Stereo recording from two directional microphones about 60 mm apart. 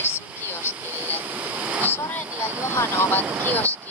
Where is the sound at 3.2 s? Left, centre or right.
Right.